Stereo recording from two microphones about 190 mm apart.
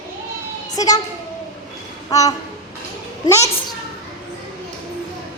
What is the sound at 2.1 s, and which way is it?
A child's voice, 20° left (ahead or behind).